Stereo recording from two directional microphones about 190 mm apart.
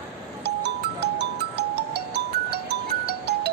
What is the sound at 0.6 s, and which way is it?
Music, 65° right (ahead or behind).